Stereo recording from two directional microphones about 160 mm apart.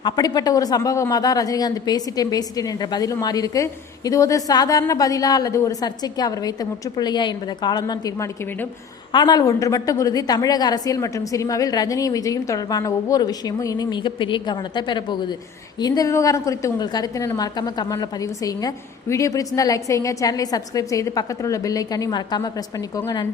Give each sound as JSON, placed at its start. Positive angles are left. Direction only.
{"t": 0.0, "sound": "speech", "side_deg": 25}